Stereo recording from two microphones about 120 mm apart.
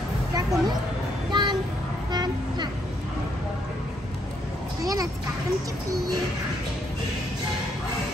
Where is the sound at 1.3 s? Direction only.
40° right (ahead or behind).